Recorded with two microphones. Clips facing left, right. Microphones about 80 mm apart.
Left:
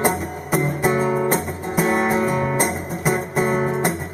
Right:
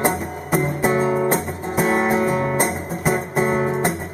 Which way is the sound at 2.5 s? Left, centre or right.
Centre.